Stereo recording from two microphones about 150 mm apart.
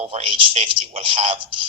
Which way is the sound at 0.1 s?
40° right (ahead or behind).